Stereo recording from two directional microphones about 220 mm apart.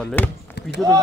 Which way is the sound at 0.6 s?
50° left (ahead or behind).